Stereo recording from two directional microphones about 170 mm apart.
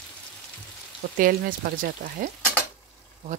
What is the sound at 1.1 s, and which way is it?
Speech, 55° right (ahead or behind).